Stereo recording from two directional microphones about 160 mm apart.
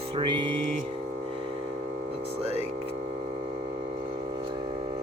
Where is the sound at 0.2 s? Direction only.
30° right (ahead or behind).